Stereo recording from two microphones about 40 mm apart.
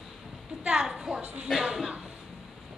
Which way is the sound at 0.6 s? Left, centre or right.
Centre.